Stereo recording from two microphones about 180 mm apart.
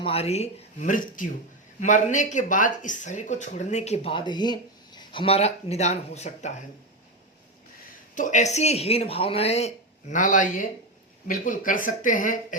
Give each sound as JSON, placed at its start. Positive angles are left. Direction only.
{"t": 0.0, "sound": "speech", "side_deg": 35}
{"t": 8.1, "sound": "speech", "side_deg": 45}